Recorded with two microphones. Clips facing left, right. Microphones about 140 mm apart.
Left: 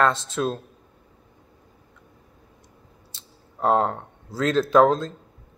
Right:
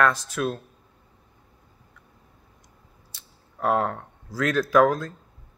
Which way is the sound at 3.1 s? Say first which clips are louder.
Left 4 dB; 25° left (ahead or behind).